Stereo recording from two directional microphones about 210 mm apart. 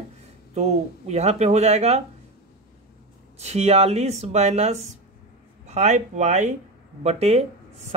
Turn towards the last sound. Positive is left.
turn(degrees=-30)  # may be behind; listen again after turning